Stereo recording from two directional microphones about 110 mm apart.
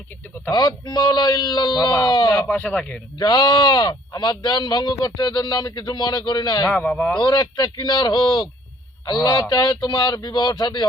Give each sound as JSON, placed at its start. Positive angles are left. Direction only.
{"t": 0.5, "sound": "speech", "side_deg": 35}
{"t": 2.5, "sound": "speech", "side_deg": 15}
{"t": 3.2, "sound": "speech", "side_deg": 35}
{"t": 6.7, "sound": "speech", "side_deg": 10}
{"t": 7.2, "sound": "speech", "side_deg": 35}